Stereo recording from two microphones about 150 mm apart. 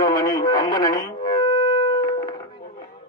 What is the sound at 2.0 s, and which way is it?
Music, 30° left (ahead or behind).